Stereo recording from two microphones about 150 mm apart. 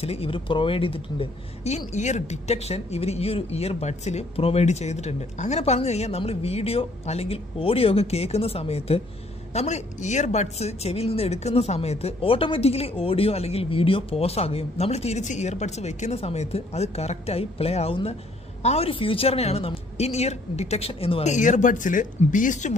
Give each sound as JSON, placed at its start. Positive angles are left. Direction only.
{"t": 0.0, "sound": "speech", "side_deg": 40}